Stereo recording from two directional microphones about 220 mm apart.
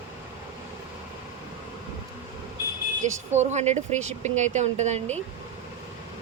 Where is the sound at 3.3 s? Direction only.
30° right (ahead or behind).